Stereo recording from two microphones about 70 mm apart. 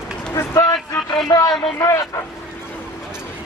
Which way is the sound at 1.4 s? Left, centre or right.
Left.